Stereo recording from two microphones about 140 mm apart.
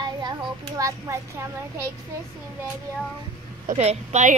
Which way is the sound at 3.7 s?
50° right (ahead or behind).